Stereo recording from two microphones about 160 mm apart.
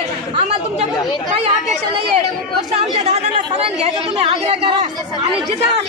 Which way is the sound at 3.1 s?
40° right (ahead or behind).